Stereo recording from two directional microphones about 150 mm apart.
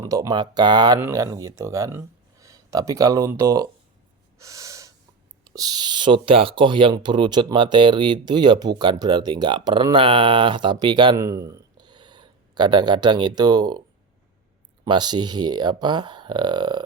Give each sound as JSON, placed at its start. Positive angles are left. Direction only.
{"t": 0.0, "sound": "speech", "side_deg": -25}
{"t": 0.9, "sound": "speech", "side_deg": -20}
{"t": 4.4, "sound": "gasp", "side_deg": -20}
{"t": 5.5, "sound": "speech", "side_deg": -25}
{"t": 11.2, "sound": "speech", "side_deg": -20}
{"t": 14.8, "sound": "speech", "side_deg": -30}